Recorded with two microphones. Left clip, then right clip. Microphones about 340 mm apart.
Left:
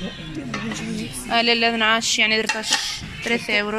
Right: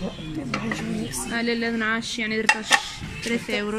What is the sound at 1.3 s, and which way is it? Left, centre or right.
Speech, centre.